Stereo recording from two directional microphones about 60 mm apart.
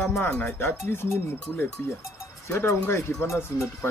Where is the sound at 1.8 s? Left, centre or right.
Left.